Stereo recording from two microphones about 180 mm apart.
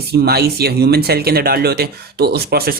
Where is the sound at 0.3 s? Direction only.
60° right (ahead or behind).